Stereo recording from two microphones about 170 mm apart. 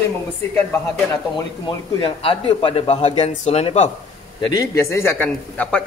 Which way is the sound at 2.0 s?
30° left (ahead or behind).